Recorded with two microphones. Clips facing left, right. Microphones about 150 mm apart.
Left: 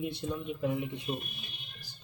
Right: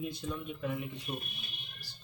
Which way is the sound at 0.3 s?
15° left (ahead or behind).